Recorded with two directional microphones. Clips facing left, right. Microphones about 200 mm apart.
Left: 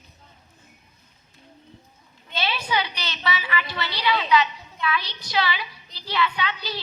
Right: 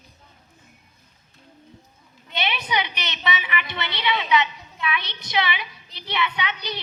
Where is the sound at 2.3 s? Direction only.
20° right (ahead or behind).